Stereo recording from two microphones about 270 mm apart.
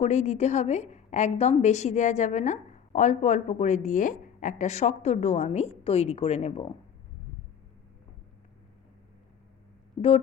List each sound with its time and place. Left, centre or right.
0.0 s a woman's voice: left